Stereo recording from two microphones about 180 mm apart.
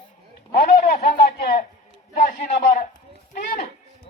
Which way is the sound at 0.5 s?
60° left (ahead or behind).